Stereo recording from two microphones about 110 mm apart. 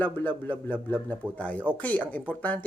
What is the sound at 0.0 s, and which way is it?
A man's voice, 15° left (ahead or behind).